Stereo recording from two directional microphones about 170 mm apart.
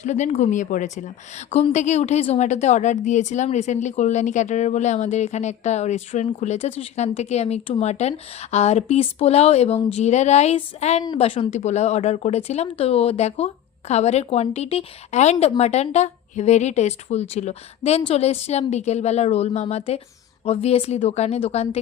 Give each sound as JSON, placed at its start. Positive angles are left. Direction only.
{"t": 0.0, "sound": "a woman's voice", "side_deg": 45}